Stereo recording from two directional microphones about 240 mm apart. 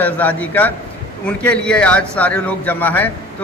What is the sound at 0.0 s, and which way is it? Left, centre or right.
A man's voice, centre.